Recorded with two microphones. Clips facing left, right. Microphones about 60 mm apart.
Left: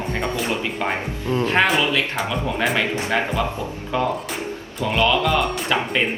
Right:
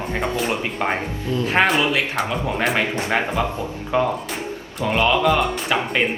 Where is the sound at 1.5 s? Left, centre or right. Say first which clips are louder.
Right 2 dB; centre.